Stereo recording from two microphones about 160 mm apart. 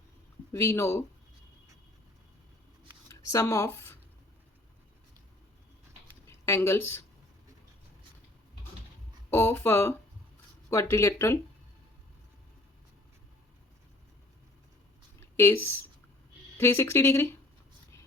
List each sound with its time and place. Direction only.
0.5 s speech: 15° left (ahead or behind)
3.1 s speech: 20° left (ahead or behind)
6.2 s a sound: 15° left (ahead or behind)
9.3 s speech: 15° left (ahead or behind)
15.4 s speech: 15° left (ahead or behind)